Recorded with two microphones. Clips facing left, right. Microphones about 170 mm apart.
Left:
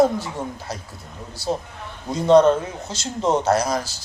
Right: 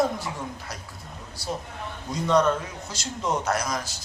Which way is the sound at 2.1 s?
30° left (ahead or behind).